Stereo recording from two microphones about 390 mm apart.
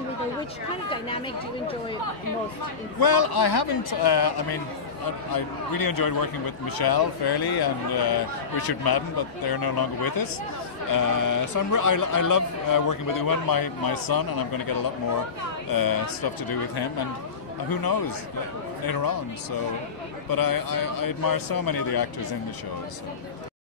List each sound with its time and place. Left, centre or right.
0.8 s speech: centre
2.2 s speech: left
5.0 s a man's voice: left
15.7 s a man's voice: left
18.9 s a man's voice: left
20.2 s a man's voice: left